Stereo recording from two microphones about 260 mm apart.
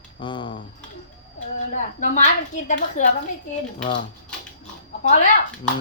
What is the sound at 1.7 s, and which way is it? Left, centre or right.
A woman's voice, left.